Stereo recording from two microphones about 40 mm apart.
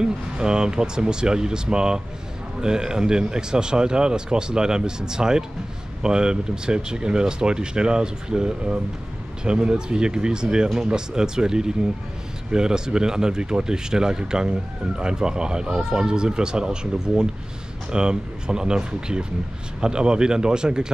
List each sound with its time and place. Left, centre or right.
0.0 s speech: centre